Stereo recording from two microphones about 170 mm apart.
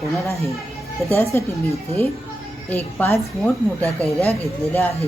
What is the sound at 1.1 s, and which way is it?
Speech, 15° left (ahead or behind).